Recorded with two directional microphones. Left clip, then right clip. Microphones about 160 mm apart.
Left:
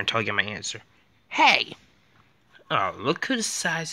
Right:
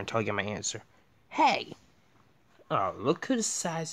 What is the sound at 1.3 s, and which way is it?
Speech, 10° right (ahead or behind).